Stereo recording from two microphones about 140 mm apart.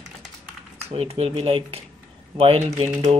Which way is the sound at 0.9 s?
45° right (ahead or behind).